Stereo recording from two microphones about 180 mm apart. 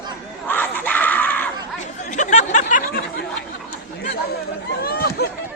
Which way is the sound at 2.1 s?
45° left (ahead or behind).